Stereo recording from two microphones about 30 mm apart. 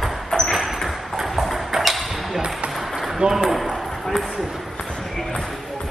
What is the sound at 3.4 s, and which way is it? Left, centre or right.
Ping, centre.